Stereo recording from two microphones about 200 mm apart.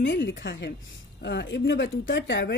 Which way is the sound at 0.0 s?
60° left (ahead or behind).